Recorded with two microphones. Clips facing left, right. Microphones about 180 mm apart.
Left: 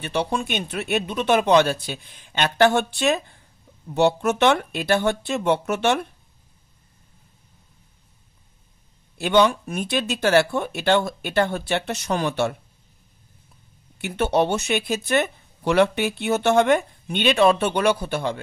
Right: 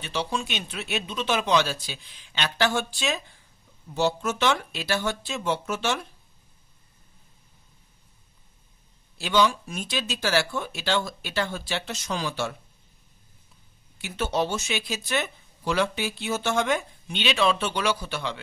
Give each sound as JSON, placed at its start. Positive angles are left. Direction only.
{"t": 0.0, "sound": "speech", "side_deg": 55}
{"t": 9.2, "sound": "speech", "side_deg": 60}
{"t": 13.9, "sound": "speech", "side_deg": 60}